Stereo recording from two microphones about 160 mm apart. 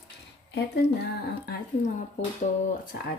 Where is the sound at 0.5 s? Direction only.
75° left (ahead or behind).